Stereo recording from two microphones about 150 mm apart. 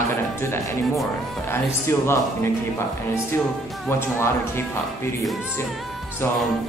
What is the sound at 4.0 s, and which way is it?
Speech, 15° left (ahead or behind).